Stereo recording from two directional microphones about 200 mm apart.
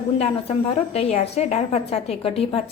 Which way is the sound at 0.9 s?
30° left (ahead or behind).